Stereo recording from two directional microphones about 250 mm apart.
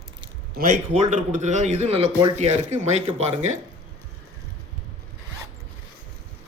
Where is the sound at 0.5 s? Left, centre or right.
Right.